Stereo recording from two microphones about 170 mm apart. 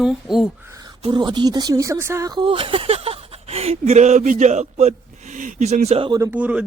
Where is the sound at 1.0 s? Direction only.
25° right (ahead or behind).